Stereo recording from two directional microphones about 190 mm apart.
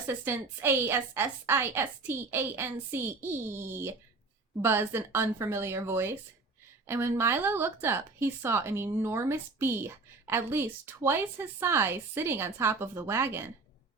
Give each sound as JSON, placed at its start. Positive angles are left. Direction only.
{"t": 0.1, "sound": "speech", "side_deg": -10}